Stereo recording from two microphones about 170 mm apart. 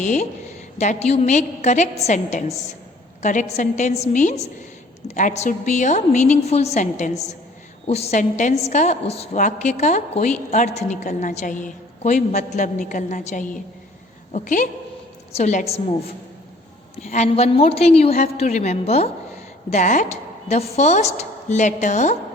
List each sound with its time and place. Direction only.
0.0 s a woman's voice: 45° left (ahead or behind)
17.0 s a woman's voice: 40° left (ahead or behind)